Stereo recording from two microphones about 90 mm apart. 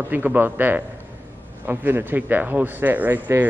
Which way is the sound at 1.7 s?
25° right (ahead or behind).